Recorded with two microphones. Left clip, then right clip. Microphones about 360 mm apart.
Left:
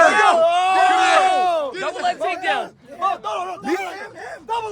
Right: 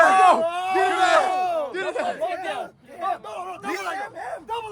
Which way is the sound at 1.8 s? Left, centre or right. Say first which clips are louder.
Left 2 dB; centre.